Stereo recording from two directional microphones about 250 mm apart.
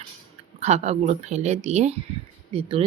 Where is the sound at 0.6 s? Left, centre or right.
Right.